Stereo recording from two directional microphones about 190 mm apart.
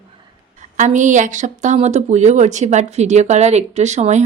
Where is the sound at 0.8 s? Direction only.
40° right (ahead or behind).